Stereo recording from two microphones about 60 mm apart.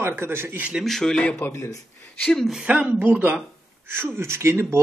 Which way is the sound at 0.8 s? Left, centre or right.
Centre.